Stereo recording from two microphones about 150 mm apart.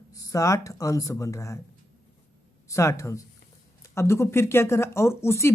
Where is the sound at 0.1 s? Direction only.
20° left (ahead or behind).